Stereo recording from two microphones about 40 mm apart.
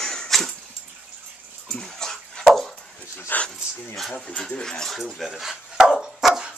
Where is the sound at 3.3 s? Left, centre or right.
Left.